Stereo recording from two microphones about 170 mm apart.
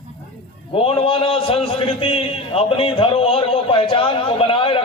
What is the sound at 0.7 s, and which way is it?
A man's voice, 35° left (ahead or behind).